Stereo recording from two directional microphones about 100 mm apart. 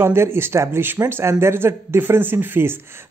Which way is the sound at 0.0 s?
25° right (ahead or behind).